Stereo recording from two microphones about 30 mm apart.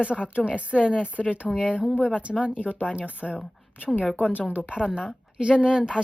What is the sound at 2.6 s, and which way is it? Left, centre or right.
Speech, left.